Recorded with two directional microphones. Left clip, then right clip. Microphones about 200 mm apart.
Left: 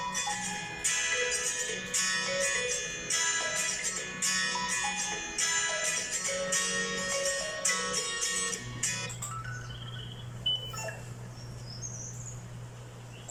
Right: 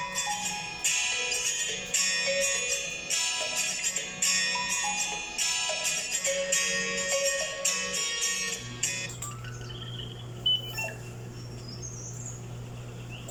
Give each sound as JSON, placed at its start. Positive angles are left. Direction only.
{"t": 0.0, "sound": "music", "side_deg": -5}